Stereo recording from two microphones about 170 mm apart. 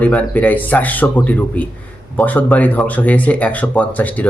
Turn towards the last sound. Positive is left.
turn(degrees=10)  # may be behind; listen again after turning